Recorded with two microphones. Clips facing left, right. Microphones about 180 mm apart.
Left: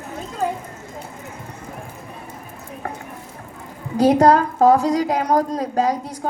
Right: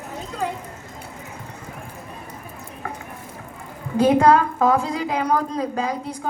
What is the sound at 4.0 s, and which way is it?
A woman's voice, 40° left (ahead or behind).